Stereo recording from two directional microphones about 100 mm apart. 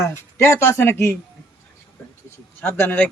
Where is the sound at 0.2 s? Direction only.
25° left (ahead or behind).